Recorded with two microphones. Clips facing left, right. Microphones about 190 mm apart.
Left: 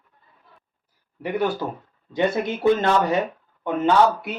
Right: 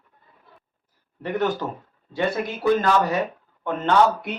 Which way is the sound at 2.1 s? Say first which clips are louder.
Left 3 dB; 25° left (ahead or behind).